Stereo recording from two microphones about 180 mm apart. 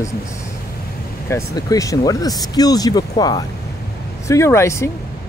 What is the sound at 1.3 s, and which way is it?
Speech, 20° left (ahead or behind).